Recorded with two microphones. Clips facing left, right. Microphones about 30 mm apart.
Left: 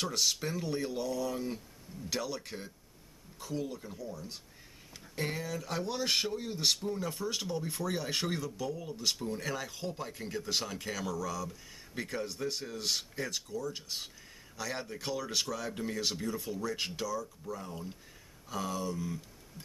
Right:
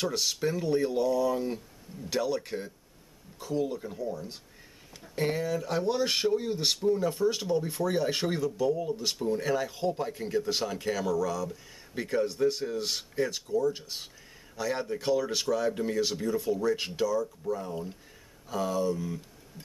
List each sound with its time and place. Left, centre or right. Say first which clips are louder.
0.0 s speech: right 3 dB; centre
4.9 s speech: right 7 dB; centre
17.1 s speech: right 8 dB; centre
17.6 s speech: right 7 dB; centre